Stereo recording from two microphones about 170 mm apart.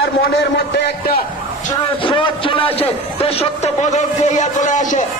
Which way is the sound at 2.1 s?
30° left (ahead or behind).